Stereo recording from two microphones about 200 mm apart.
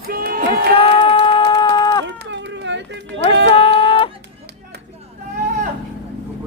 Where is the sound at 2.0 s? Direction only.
65° right (ahead or behind).